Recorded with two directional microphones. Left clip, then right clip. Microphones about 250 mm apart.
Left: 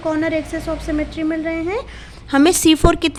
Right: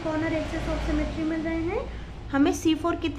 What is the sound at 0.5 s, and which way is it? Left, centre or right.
A woman's voice, left.